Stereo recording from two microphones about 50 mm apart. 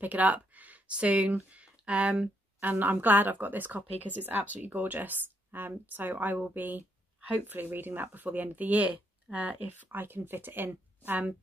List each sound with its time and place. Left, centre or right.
0.0 s a sound: right
2.7 s speech: right
9.8 s speech: right